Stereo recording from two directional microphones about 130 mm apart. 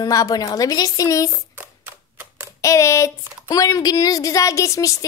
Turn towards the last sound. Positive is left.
turn(degrees=25)  # may be behind; listen again after turning